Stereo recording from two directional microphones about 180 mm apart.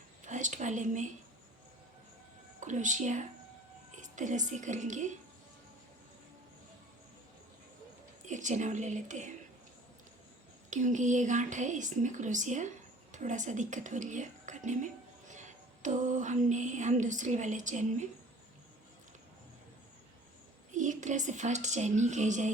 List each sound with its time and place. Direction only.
0.3 s a sound: 45° right (ahead or behind)
2.6 s speech: 45° right (ahead or behind)
8.2 s speech: 45° right (ahead or behind)
10.7 s speech: 45° right (ahead or behind)
15.3 s a sound: 45° right (ahead or behind)
20.7 s a woman's voice: 45° right (ahead or behind)